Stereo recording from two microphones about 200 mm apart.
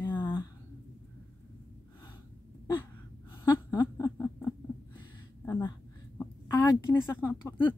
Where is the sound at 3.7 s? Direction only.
20° left (ahead or behind).